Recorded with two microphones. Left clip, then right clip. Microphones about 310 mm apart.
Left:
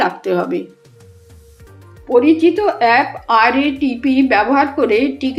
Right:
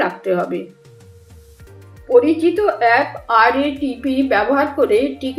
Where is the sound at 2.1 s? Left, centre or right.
Left.